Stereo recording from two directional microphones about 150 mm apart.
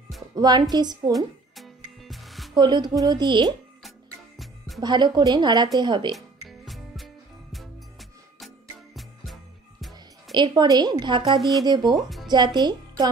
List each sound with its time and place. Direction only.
0.4 s a woman's voice: 25° right (ahead or behind)
1.1 s music: centre (ahead or behind)
2.5 s a woman's voice: 30° right (ahead or behind)
4.4 s music: centre (ahead or behind)
4.8 s a woman's voice: 30° right (ahead or behind)
6.1 s music: centre (ahead or behind)
10.3 s a woman's voice: 30° right (ahead or behind)